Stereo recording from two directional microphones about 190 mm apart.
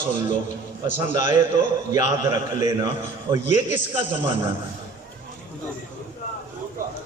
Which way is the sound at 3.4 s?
40° left (ahead or behind).